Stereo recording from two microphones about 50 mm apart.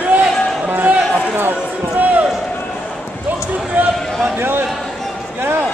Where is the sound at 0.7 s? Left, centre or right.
Right.